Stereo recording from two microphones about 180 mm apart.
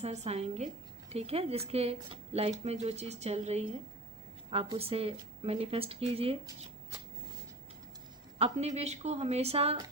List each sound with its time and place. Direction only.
0.0 s speech: 40° right (ahead or behind)
8.4 s speech: 35° right (ahead or behind)